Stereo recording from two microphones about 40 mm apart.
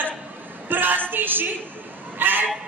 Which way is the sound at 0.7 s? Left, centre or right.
Right.